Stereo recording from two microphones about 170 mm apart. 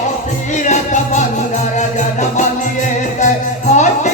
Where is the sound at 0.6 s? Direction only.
45° left (ahead or behind).